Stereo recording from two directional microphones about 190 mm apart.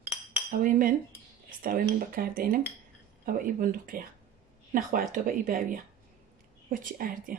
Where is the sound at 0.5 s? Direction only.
45° right (ahead or behind).